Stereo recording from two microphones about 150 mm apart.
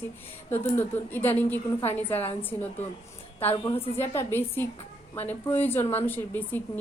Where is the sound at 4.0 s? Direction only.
15° left (ahead or behind).